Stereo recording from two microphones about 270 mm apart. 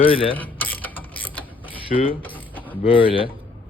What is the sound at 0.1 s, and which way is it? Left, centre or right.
Speech, centre.